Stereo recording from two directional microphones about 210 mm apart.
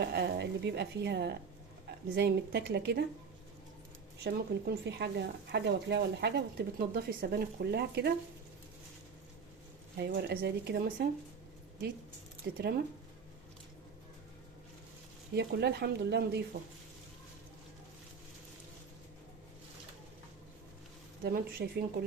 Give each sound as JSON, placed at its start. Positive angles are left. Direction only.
{"t": 0.0, "sound": "speech", "side_deg": -50}
{"t": 4.2, "sound": "speech", "side_deg": -50}
{"t": 10.0, "sound": "speech", "side_deg": -50}
{"t": 12.5, "sound": "speech", "side_deg": -50}
{"t": 15.4, "sound": "speech", "side_deg": -50}
{"t": 21.2, "sound": "speech", "side_deg": -45}